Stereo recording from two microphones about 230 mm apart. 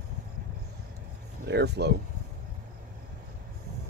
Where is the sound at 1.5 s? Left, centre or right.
Right.